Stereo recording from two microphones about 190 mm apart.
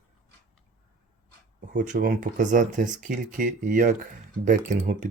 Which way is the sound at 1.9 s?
45° right (ahead or behind).